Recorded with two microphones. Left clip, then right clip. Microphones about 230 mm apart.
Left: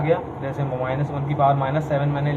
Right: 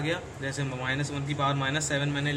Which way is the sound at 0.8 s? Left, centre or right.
Right.